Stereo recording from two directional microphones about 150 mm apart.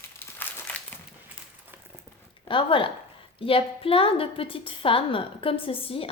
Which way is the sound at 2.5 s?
35° left (ahead or behind).